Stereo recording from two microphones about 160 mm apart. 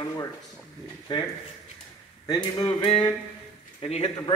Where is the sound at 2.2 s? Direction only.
35° left (ahead or behind).